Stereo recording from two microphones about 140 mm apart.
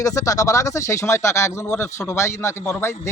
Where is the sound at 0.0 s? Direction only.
25° left (ahead or behind).